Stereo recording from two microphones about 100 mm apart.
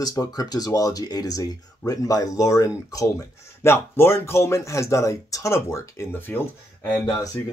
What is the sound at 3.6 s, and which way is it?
Speech, 25° left (ahead or behind).